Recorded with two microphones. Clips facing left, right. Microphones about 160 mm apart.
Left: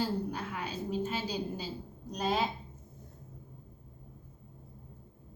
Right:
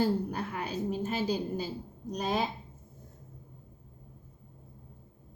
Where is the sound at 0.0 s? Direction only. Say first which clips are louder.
Right 4 dB; 50° right (ahead or behind).